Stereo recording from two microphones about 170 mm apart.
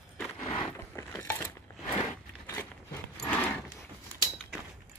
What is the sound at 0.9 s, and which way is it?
Coin, 10° left (ahead or behind).